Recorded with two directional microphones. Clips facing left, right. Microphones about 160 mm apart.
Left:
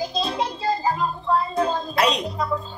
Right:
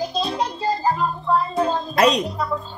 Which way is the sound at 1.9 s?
45° right (ahead or behind).